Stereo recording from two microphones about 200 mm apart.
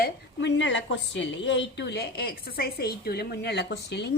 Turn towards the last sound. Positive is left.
turn(degrees=55)  # may be behind; listen again after turning